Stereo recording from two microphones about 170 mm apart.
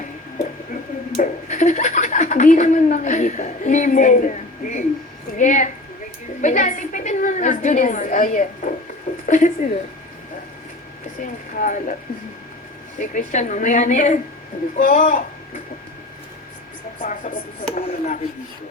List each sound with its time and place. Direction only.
0.3 s a woman's voice: 50° left (ahead or behind)
11.2 s a woman's voice: 50° left (ahead or behind)
13.0 s a woman's voice: 50° left (ahead or behind)
17.0 s a woman's voice: 50° left (ahead or behind)